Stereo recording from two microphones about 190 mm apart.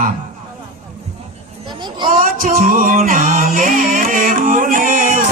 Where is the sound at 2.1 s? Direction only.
50° right (ahead or behind).